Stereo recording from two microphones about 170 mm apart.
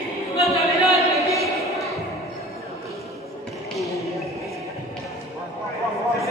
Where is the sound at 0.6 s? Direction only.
20° left (ahead or behind).